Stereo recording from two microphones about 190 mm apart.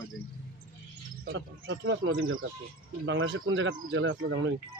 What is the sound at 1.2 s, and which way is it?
Speech, 70° right (ahead or behind).